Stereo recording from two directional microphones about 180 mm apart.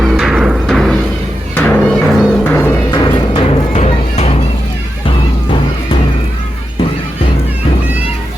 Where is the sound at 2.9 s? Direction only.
25° left (ahead or behind).